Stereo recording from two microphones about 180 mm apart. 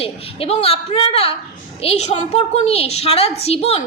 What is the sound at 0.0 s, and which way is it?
A woman's voice, 35° left (ahead or behind).